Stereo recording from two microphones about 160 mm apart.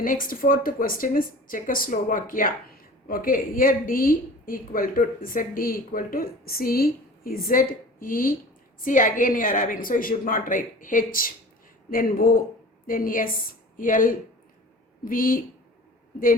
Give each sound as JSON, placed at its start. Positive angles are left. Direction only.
{"t": 0.0, "sound": "a woman's voice", "side_deg": 60}